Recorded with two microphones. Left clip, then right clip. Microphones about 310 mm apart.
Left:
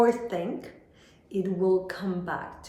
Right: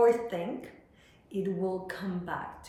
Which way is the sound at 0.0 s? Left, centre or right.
Centre.